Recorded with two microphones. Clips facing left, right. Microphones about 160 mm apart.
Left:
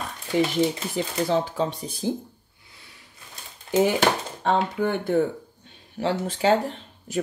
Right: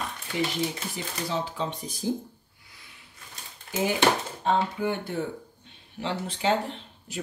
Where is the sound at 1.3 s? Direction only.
45° left (ahead or behind).